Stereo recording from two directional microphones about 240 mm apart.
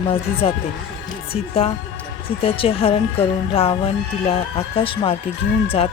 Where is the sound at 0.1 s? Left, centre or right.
Left.